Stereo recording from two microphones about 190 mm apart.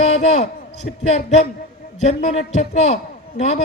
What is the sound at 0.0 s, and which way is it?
A man's voice, 35° left (ahead or behind).